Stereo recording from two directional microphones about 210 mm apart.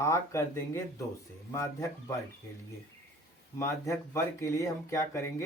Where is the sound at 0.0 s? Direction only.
15° left (ahead or behind).